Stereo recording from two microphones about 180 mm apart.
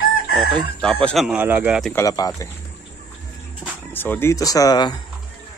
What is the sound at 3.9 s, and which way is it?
Speech, 10° left (ahead or behind).